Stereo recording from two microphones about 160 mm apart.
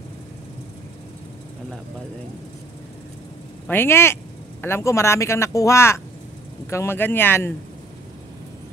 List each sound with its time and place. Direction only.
3.6 s speech: 15° left (ahead or behind)